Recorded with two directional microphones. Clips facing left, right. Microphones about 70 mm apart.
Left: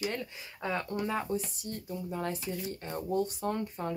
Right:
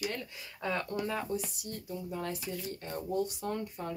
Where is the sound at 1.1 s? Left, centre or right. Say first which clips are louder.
Left 2 dB; left.